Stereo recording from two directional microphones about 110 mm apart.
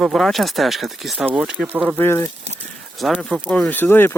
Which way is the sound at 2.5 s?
90° right.